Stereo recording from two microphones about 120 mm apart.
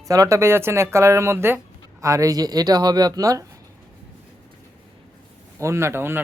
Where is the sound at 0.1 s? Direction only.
25° right (ahead or behind).